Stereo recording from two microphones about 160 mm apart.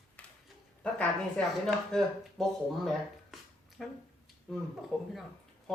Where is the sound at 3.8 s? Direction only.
Centre (ahead or behind).